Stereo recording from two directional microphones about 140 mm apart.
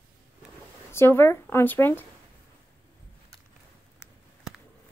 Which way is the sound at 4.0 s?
5° right (ahead or behind).